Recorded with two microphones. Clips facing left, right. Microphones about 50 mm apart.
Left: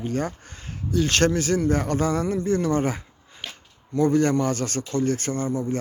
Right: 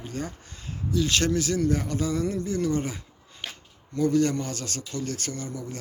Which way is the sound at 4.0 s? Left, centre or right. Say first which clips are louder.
Left 3 dB; left.